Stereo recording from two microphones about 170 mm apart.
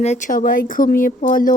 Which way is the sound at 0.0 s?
45° left (ahead or behind).